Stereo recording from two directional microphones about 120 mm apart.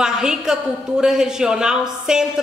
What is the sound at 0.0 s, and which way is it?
A woman's voice, 5° right (ahead or behind).